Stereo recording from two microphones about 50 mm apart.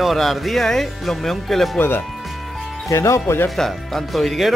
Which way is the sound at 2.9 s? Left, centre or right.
Left.